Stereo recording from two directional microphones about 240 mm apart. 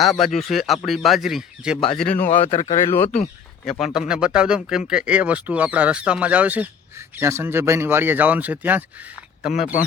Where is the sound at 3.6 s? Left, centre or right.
Centre.